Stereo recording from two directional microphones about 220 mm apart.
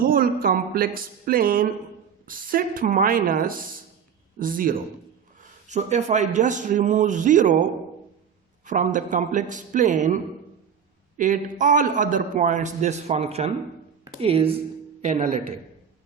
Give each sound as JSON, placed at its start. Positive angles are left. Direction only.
{"t": 0.0, "sound": "a man's voice", "side_deg": -40}
{"t": 8.6, "sound": "a man's voice", "side_deg": -35}
{"t": 11.2, "sound": "a man's voice", "side_deg": -35}